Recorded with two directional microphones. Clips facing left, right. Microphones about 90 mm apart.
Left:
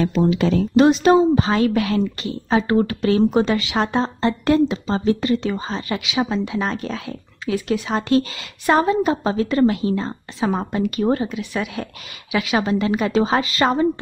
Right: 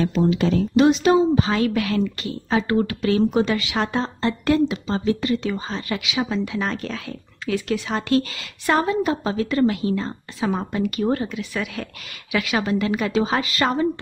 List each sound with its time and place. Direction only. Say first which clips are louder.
0.7 s a woman's voice: left 3 dB; 45° left (ahead or behind); by 13.8 s 25° left (ahead or behind)